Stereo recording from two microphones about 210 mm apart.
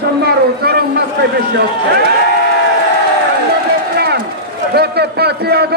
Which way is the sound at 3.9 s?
50° right (ahead or behind).